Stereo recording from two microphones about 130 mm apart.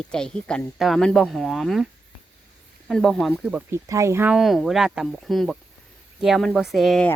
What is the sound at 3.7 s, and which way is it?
Speech, 20° right (ahead or behind).